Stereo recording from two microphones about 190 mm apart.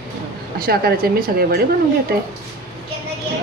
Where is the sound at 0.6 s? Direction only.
55° right (ahead or behind).